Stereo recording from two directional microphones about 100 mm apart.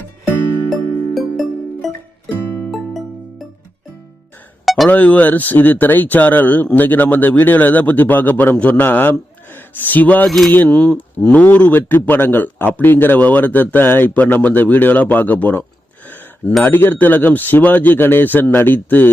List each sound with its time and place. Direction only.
0.7 s music: centre (ahead or behind)
4.6 s a sound: centre (ahead or behind)
4.9 s a man's voice: 15° left (ahead or behind)
10.2 s speech: centre (ahead or behind)
10.5 s speech: 10° left (ahead or behind)
16.0 s a sound: 20° left (ahead or behind)
16.6 s speech: 20° left (ahead or behind)